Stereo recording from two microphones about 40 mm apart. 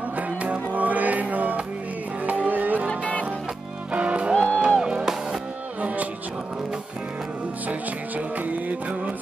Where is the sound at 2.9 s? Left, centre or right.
Left.